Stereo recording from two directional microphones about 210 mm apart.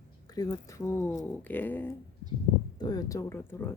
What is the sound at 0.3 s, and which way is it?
Speech, 15° left (ahead or behind).